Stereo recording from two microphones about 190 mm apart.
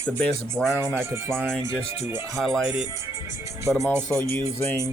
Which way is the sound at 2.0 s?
15° right (ahead or behind).